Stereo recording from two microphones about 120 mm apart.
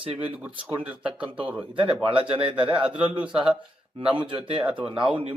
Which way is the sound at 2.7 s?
10° right (ahead or behind).